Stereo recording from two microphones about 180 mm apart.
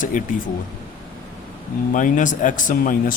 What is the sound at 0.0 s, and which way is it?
Speech, 50° left (ahead or behind).